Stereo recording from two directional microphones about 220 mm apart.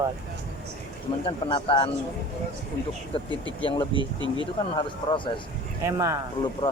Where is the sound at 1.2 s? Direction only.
20° left (ahead or behind).